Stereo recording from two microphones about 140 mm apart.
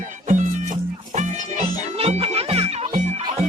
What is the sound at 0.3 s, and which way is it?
Music, 60° right (ahead or behind).